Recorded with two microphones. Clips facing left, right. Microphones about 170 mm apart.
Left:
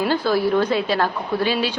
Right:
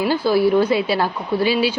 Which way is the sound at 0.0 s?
10° right (ahead or behind).